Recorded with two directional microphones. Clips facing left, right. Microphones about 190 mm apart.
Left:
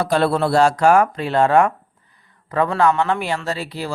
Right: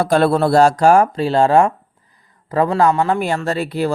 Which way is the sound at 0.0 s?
45° right (ahead or behind).